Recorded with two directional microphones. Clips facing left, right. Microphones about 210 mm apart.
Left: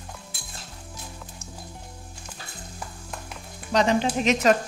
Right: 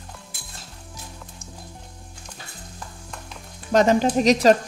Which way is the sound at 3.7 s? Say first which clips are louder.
Right 4 dB; 45° right (ahead or behind).